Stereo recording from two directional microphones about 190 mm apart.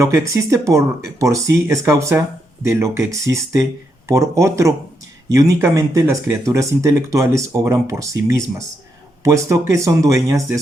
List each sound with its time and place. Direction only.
0.0 s speech: 15° right (ahead or behind)